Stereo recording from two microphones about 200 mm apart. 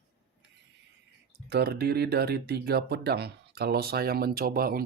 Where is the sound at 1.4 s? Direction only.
55° right (ahead or behind).